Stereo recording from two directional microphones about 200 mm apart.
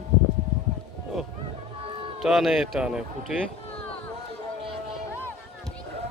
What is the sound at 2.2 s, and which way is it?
Speech, centre (ahead or behind).